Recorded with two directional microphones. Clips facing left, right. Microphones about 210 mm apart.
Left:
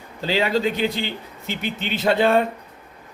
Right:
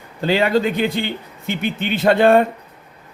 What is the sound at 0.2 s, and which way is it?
Speech, 55° right (ahead or behind).